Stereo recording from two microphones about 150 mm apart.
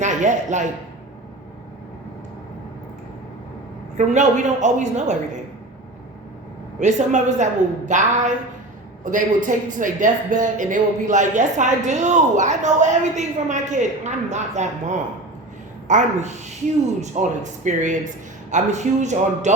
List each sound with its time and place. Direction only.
0.0 s a man's voice: 55° right (ahead or behind)
3.9 s speech: 55° right (ahead or behind)
6.7 s a man's voice: 55° right (ahead or behind)